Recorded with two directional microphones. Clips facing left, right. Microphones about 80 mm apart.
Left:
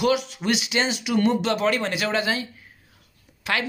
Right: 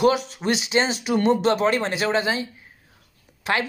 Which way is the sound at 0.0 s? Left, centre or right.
Right.